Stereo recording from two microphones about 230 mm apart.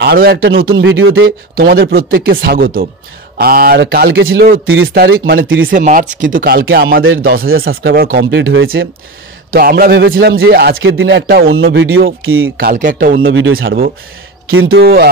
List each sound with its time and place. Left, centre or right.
0.0 s a man's voice: right
0.7 s a man's voice: right
1.2 s speech: right
9.5 s speech: right
11.4 s speech: right
12.5 s speech: right
13.3 s speech: right
14.7 s a man's voice: right